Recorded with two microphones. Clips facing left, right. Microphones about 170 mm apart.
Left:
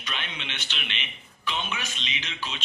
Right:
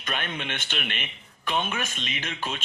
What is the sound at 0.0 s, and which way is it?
A man's voice, 50° right (ahead or behind).